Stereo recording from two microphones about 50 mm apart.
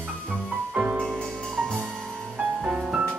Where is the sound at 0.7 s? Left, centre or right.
Right.